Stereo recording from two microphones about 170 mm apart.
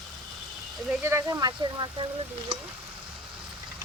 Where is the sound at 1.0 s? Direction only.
15° right (ahead or behind).